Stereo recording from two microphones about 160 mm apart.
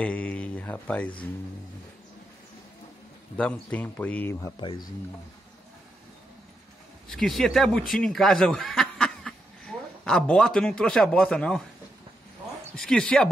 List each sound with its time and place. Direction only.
0.0 s speech: 10° left (ahead or behind)
3.3 s speech: 10° left (ahead or behind)
4.6 s speech: 30° left (ahead or behind)
7.1 s speech: centre (ahead or behind)
12.7 s speech: 5° left (ahead or behind)